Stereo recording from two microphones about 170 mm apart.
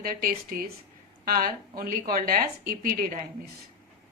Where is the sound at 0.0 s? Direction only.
60° right (ahead or behind).